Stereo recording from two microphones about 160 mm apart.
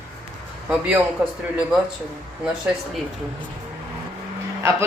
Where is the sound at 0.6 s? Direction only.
5° right (ahead or behind).